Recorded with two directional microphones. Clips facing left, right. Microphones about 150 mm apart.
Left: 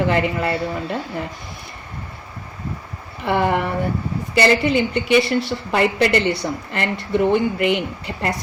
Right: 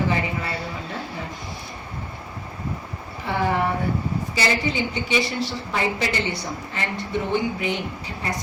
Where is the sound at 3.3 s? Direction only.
70° left (ahead or behind).